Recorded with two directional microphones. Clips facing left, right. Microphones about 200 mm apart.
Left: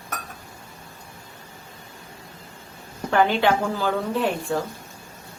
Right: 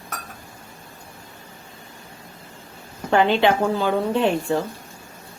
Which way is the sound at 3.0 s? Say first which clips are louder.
Right 2 dB; 20° right (ahead or behind).